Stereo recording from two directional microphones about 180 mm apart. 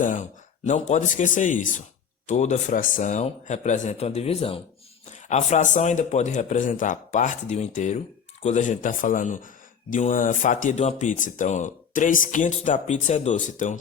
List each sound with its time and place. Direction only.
0.0 s speech: 45° left (ahead or behind)